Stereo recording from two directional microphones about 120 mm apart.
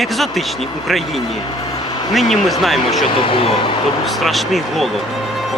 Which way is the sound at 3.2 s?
50° left (ahead or behind).